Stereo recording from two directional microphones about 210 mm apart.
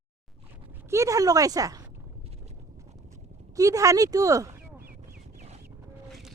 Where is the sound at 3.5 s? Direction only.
15° right (ahead or behind).